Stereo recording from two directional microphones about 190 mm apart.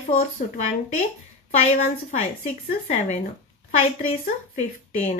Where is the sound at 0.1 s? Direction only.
35° left (ahead or behind).